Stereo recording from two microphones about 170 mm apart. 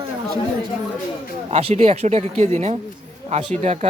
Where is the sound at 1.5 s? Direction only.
40° right (ahead or behind).